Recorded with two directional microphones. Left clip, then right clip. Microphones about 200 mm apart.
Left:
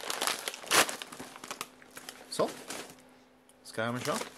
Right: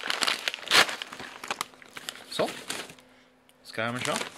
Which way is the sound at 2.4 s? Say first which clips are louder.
Right 5 dB; 50° right (ahead or behind).